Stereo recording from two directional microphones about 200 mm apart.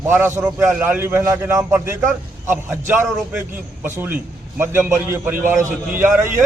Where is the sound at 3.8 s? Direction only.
10° right (ahead or behind).